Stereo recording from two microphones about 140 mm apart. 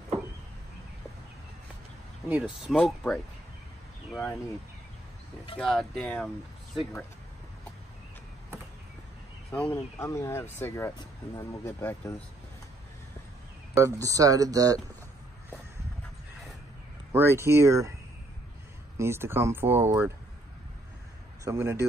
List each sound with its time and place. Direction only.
2.2 s speech: 10° right (ahead or behind)
2.8 s speech: 5° left (ahead or behind)
5.6 s speech: 5° left (ahead or behind)
9.5 s speech: 10° left (ahead or behind)
13.7 s speech: 20° right (ahead or behind)
17.1 s speech: 15° right (ahead or behind)
18.9 s speech: 15° right (ahead or behind)
21.5 s speech: 15° right (ahead or behind)